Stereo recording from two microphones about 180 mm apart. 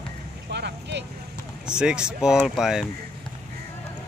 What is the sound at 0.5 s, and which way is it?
Vehicle, 70° right (ahead or behind).